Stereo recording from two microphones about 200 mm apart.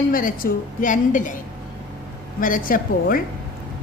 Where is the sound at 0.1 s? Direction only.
45° left (ahead or behind).